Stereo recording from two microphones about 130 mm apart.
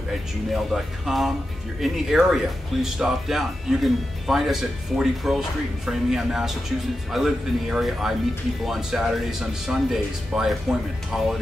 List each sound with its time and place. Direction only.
0.5 s speech: centre (ahead or behind)